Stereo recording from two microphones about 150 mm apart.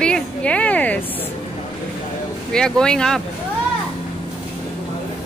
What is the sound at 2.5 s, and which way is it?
Speech, 5° left (ahead or behind).